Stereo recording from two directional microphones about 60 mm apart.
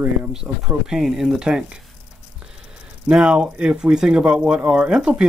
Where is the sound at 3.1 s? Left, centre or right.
Centre.